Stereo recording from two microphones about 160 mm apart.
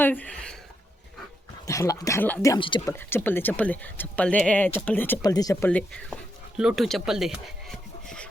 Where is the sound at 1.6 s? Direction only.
20° left (ahead or behind).